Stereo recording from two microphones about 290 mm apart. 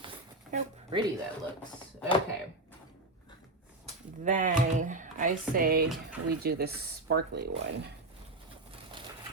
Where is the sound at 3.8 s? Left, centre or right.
Right.